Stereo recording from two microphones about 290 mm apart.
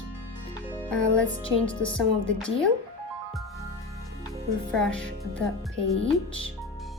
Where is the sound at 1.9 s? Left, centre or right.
Centre.